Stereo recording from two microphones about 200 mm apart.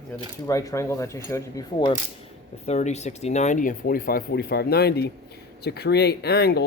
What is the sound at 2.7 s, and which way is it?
Speech, 35° left (ahead or behind).